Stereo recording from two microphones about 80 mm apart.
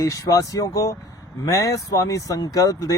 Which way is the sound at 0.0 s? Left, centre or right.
Left.